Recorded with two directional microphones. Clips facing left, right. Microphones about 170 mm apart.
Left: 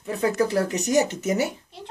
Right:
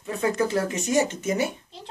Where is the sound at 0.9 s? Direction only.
15° left (ahead or behind).